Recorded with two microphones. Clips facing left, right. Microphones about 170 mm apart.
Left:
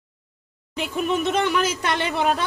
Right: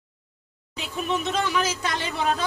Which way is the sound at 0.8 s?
60° left (ahead or behind).